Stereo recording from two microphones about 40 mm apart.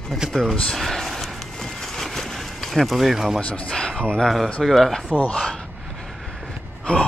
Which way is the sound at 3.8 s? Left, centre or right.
Left.